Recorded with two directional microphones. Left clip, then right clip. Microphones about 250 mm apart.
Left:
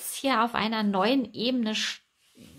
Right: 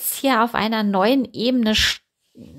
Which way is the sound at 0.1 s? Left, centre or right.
Right.